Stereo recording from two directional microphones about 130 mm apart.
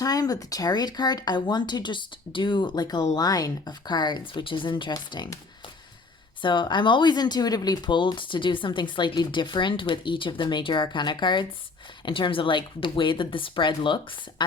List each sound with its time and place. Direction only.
0.0 s speech: 30° left (ahead or behind)
6.4 s speech: 35° left (ahead or behind)